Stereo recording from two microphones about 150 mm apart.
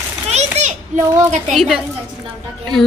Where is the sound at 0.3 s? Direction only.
50° right (ahead or behind).